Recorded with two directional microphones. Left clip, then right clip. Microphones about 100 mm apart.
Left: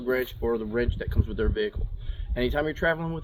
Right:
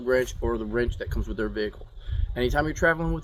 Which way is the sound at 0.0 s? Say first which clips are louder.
Right 2 dB; 30° right (ahead or behind).